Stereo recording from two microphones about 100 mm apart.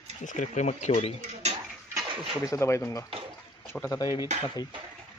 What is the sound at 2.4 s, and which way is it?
Speech, 30° left (ahead or behind).